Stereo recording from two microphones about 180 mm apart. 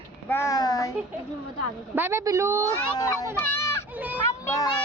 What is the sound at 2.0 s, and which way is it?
Speech, 15° right (ahead or behind).